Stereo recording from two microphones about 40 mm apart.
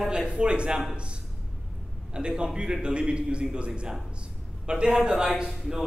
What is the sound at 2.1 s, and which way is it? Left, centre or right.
A man's voice, right.